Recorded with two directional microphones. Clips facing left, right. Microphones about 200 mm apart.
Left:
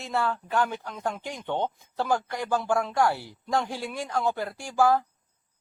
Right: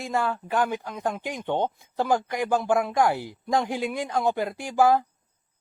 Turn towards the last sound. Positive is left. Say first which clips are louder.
# right 2 dB
turn(degrees=-20)  # may be behind; listen again after turning